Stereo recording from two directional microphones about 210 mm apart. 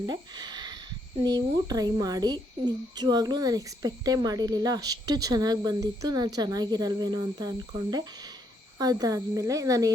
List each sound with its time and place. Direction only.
0.0 s a woman's voice: 20° right (ahead or behind)